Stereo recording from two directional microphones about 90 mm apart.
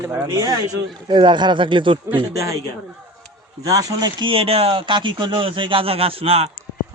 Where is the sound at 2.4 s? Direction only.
40° right (ahead or behind).